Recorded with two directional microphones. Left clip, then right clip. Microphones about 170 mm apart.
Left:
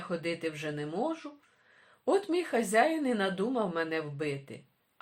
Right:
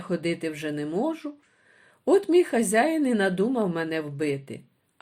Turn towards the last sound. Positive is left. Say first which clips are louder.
# right 7 dB
turn(degrees=-35)  # may be behind; listen again after turning